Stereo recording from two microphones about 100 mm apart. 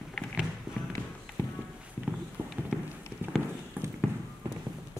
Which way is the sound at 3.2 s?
20° right (ahead or behind).